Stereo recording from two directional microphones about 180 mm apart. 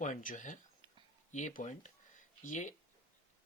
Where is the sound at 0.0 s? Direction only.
45° left (ahead or behind).